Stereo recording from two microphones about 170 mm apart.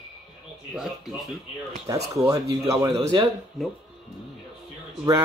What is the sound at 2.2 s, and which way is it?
Speech, 20° right (ahead or behind).